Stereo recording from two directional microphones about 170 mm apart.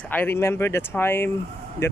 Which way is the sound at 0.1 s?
15° left (ahead or behind).